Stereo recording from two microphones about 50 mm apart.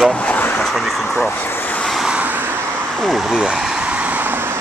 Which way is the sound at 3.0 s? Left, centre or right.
Centre.